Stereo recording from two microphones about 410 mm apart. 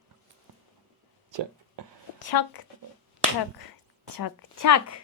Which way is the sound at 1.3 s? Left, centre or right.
Right.